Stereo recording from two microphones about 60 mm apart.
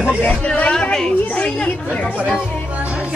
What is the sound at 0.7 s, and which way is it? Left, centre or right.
Speech, centre.